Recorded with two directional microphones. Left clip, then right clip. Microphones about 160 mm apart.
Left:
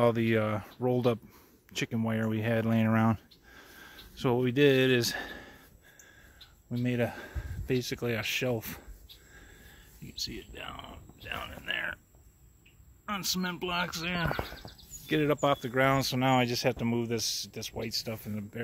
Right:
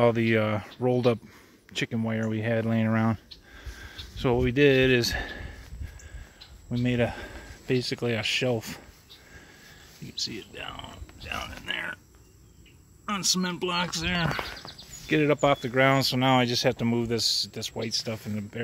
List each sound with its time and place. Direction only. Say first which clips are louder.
0.0 s speech: right 4 dB; 5° left (ahead or behind)
3.5 s a sound: right 5 dB; 5° left (ahead or behind)
6.8 s speech: right 4 dB; centre (ahead or behind)
10.0 s speech: right 5 dB; 5° right (ahead or behind)
13.0 s speech: right 6 dB; centre (ahead or behind)